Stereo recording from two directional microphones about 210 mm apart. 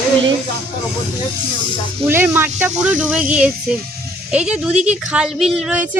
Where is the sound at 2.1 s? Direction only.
10° right (ahead or behind).